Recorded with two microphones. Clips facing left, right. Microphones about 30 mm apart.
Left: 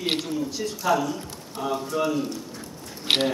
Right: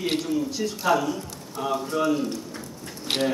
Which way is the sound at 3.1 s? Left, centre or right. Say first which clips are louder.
Left 4 dB; left.